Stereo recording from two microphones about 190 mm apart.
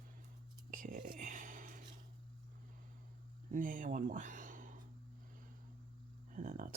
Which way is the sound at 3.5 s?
45° right (ahead or behind).